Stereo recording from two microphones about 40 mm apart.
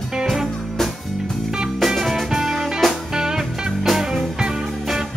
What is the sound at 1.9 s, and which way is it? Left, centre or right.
Music, centre.